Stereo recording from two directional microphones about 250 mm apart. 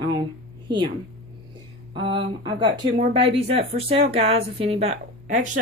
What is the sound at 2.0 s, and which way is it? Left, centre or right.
Speech, centre.